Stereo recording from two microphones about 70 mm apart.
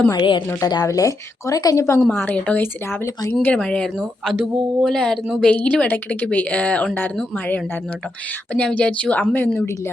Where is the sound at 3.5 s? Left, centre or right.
Centre.